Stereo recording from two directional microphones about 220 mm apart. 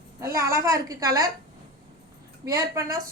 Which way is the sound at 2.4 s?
15° right (ahead or behind).